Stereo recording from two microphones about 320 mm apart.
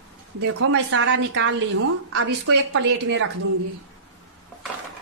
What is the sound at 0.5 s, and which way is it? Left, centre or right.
A woman's voice, right.